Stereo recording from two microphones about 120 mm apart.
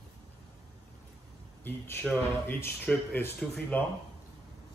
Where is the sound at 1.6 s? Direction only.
20° left (ahead or behind).